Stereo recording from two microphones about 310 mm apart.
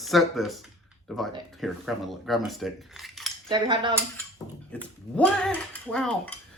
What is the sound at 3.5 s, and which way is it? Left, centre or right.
Speech, centre.